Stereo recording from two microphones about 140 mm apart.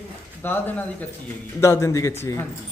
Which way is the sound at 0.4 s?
15° left (ahead or behind).